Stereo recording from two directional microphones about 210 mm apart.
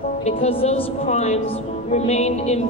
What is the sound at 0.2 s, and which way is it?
A woman's voice, 30° left (ahead or behind).